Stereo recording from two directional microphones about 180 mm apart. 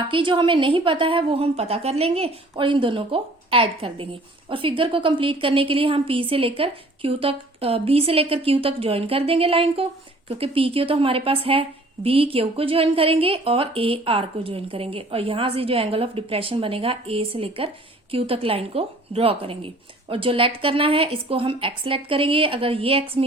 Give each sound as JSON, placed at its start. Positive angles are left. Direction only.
{"t": 0.1, "sound": "a woman's voice", "side_deg": -25}